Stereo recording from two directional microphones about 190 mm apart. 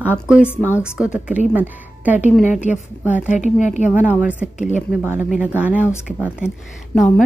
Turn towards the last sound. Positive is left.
turn(degrees=-5)  # may be behind; listen again after turning